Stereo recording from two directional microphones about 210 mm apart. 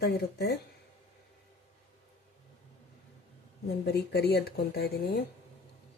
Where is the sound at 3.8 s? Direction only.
50° left (ahead or behind).